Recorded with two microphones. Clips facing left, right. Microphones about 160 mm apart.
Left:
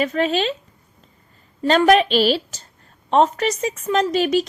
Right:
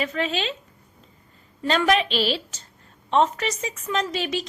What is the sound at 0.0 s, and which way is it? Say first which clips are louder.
Speech: left 6 dB; 45° left (ahead or behind).